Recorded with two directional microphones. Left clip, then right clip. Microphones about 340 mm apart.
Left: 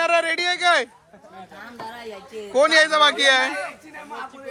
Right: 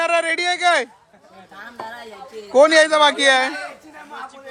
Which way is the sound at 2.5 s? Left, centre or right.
Centre.